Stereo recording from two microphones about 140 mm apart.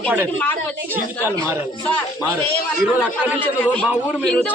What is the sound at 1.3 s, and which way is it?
Speech, 25° right (ahead or behind).